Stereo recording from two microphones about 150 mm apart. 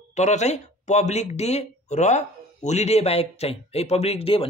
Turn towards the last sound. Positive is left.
turn(degrees=40)  # may be behind; listen again after turning